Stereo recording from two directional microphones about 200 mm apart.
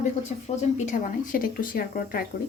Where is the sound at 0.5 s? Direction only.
40° left (ahead or behind).